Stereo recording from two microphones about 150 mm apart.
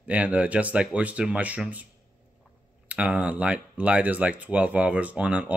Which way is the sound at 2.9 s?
10° right (ahead or behind).